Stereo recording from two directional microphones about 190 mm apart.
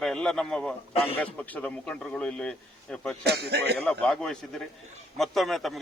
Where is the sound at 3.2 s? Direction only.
60° right (ahead or behind).